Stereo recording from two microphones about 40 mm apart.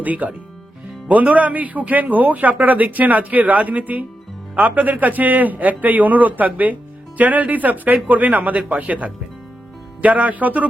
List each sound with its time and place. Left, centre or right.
0.0 s speech: right